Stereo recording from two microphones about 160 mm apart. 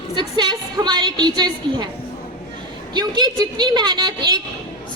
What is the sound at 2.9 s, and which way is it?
A woman's voice, 25° right (ahead or behind).